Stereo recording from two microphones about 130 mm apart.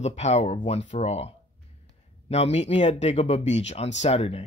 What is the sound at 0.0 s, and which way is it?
Speech, 55° left (ahead or behind).